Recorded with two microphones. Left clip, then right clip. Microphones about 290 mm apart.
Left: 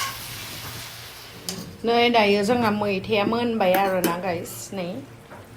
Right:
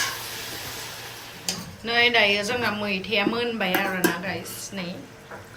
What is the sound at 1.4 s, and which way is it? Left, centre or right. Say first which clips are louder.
A woman's voice: left 4 dB; centre.